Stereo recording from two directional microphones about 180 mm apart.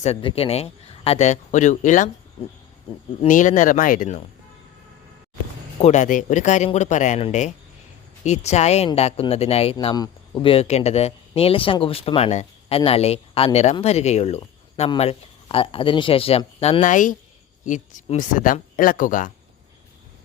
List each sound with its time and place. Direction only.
0.0 s speech: 30° left (ahead or behind)
3.2 s speech: 45° left (ahead or behind)
5.8 s speech: 40° left (ahead or behind)
9.7 s speech: 20° left (ahead or behind); by 19.3 s 45° left (ahead or behind)